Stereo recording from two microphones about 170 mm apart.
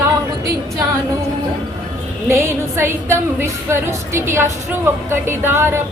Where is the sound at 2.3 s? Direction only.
15° right (ahead or behind).